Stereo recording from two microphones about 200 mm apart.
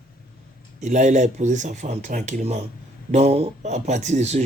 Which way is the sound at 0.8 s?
35° right (ahead or behind).